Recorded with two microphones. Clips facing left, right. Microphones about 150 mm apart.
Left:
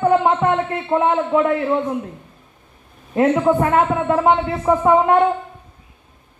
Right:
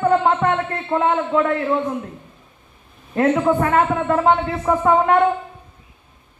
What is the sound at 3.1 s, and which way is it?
A woman's voice, 15° left (ahead or behind).